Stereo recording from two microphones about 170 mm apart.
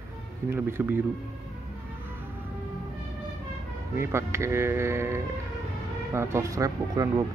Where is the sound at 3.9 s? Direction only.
15° right (ahead or behind).